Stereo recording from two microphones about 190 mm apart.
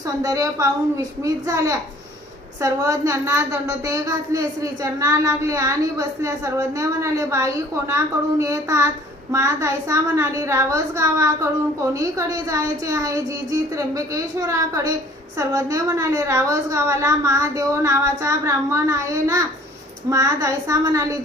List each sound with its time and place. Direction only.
0.2 s a woman's voice: 20° right (ahead or behind)